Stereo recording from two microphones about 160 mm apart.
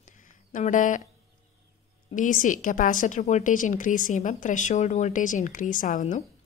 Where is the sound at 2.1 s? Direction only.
55° left (ahead or behind).